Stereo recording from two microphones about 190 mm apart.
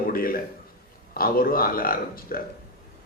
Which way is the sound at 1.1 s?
50° left (ahead or behind).